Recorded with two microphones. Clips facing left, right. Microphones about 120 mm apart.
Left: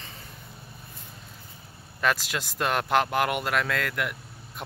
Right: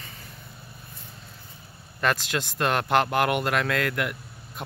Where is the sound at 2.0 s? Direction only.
5° left (ahead or behind).